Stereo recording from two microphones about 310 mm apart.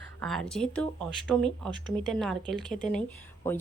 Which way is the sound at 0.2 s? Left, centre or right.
Centre.